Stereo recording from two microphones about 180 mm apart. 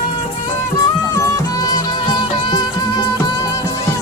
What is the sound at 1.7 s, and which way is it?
Music, 20° left (ahead or behind).